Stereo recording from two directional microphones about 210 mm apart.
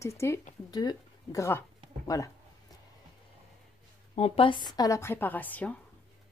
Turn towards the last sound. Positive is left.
turn(degrees=5)  # may be behind; listen again after turning